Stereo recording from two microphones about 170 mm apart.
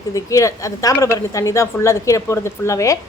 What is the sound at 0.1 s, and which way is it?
A woman's voice, 20° left (ahead or behind).